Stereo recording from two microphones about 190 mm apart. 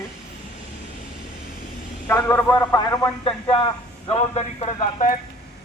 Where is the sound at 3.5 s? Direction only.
30° left (ahead or behind).